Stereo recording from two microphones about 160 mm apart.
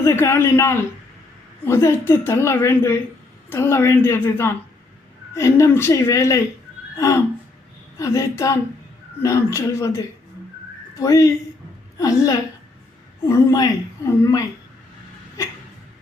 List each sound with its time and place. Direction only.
0.0 s a man's voice: 15° left (ahead or behind)
6.9 s gasp: 20° left (ahead or behind)
7.9 s a woman's voice: 20° left (ahead or behind)